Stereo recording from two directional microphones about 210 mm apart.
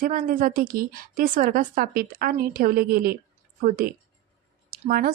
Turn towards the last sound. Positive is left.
turn(degrees=-45)  # may be behind; listen again after turning